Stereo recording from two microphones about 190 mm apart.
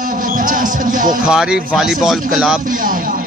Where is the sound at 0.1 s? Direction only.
45° right (ahead or behind).